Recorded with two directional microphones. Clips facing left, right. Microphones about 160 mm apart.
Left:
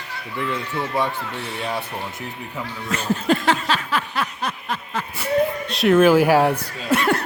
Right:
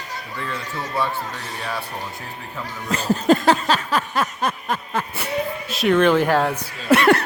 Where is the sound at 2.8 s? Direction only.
35° right (ahead or behind).